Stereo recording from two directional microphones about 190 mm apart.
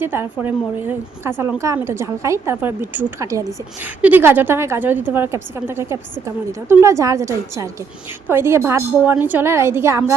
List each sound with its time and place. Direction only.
0.0 s a woman's voice: 10° right (ahead or behind)